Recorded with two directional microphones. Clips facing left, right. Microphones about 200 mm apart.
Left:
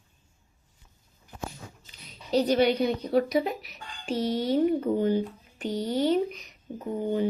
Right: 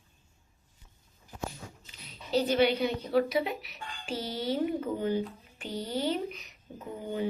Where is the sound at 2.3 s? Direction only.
40° left (ahead or behind).